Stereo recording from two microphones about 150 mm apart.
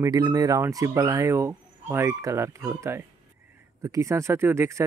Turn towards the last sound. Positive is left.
turn(degrees=-15)  # may be behind; listen again after turning